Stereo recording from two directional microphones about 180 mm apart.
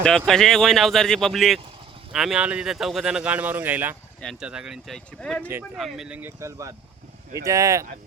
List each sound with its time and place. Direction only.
0.3 s speech: centre (ahead or behind)
4.2 s speech: centre (ahead or behind); by 7.9 s 15° right (ahead or behind)